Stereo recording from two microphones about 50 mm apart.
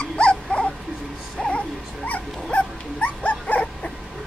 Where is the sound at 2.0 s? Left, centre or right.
Left.